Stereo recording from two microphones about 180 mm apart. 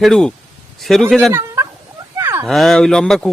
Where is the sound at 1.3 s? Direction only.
15° right (ahead or behind).